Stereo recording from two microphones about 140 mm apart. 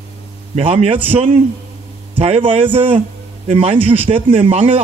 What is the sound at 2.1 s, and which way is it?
A man's voice, 40° right (ahead or behind).